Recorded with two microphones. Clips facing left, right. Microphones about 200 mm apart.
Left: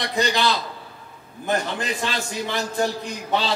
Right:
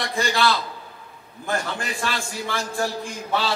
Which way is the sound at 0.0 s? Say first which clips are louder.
Left 1 dB; 20° left (ahead or behind).